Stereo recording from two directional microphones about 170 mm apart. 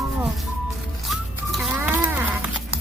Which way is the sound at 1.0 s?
Centre (ahead or behind).